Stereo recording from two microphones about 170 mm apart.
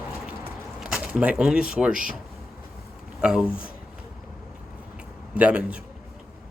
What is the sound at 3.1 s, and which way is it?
Speech, 5° right (ahead or behind).